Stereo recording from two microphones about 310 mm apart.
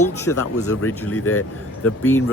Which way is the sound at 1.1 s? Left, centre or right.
Left.